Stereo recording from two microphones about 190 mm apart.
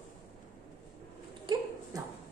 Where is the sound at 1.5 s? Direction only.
25° right (ahead or behind).